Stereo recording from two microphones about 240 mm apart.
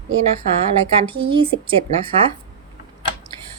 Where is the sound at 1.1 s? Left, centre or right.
Right.